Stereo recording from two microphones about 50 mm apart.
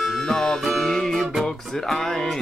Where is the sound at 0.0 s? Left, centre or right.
Centre.